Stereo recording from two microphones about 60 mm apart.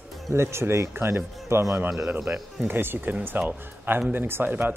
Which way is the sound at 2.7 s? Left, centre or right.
Right.